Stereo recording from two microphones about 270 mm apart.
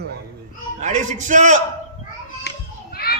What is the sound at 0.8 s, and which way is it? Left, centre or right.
Speech, right.